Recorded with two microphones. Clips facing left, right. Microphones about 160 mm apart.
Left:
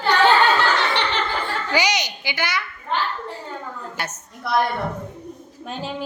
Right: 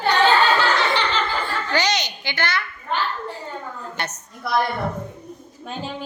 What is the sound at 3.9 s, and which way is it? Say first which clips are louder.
Speech: right 2 dB; 5° left (ahead or behind).